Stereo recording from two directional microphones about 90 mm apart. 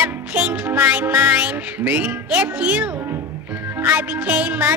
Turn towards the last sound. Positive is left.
turn(degrees=-15)  # may be behind; listen again after turning